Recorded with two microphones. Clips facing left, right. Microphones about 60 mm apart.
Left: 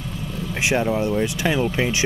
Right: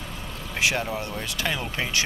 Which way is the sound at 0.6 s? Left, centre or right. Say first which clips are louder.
Left 5 dB; left.